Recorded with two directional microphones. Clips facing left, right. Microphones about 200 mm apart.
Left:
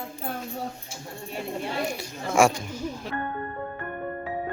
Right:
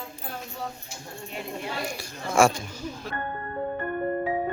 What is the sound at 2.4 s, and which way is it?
Speech, 15° left (ahead or behind).